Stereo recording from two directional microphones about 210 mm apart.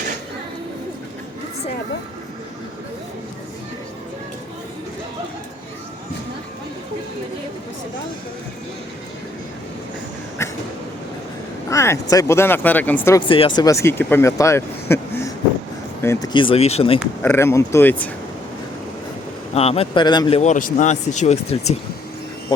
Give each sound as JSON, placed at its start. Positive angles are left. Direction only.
{"t": 11.7, "sound": "speech", "side_deg": 15}
{"t": 13.1, "sound": "speech", "side_deg": 25}
{"t": 17.2, "sound": "speech", "side_deg": 10}
{"t": 19.5, "sound": "speech", "side_deg": 30}